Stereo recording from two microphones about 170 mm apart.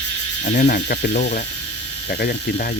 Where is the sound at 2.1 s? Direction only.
70° left (ahead or behind).